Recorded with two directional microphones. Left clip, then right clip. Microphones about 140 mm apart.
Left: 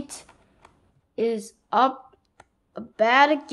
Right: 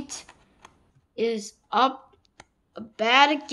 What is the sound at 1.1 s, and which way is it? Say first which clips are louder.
A woman's voice: left 1 dB; 40° left (ahead or behind).